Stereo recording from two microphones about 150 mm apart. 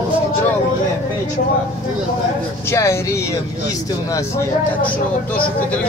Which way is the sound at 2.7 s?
20° left (ahead or behind).